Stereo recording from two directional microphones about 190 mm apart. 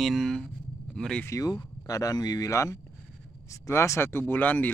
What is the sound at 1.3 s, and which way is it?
Speech, 15° left (ahead or behind).